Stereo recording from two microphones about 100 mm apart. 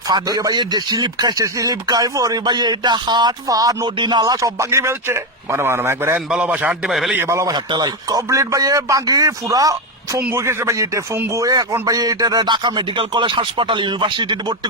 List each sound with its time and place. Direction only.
0.1 s speech: 40° right (ahead or behind)
3.9 s speech: 50° right (ahead or behind); by 6.1 s 25° right (ahead or behind)
6.1 s a man's voice: 10° right (ahead or behind)
7.2 s speech: 30° right (ahead or behind)
7.5 s speech: 40° right (ahead or behind)
10.2 s speech: 25° right (ahead or behind); by 14.7 s 50° right (ahead or behind)